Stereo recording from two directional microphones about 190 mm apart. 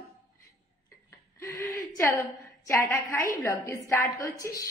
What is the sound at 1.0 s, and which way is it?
A woman's voice, 15° left (ahead or behind).